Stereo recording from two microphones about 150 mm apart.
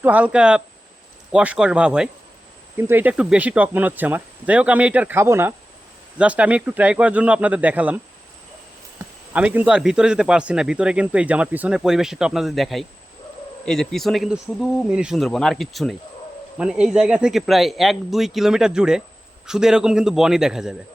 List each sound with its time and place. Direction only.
0.0 s speech: 10° right (ahead or behind)